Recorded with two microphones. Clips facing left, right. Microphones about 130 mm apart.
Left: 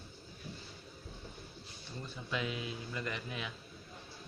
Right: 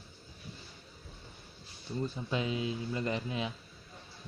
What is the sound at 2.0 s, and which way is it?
Speech, 30° right (ahead or behind).